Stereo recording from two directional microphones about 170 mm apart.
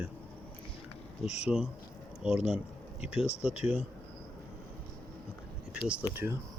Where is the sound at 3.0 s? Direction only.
5° right (ahead or behind).